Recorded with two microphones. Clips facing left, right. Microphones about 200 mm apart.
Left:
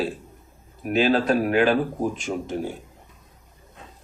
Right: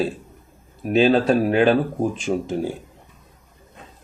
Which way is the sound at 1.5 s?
30° right (ahead or behind).